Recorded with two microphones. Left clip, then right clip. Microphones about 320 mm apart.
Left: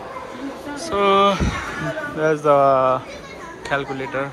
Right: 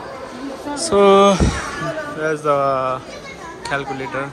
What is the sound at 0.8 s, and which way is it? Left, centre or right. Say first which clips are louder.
Speech: right 5 dB; centre.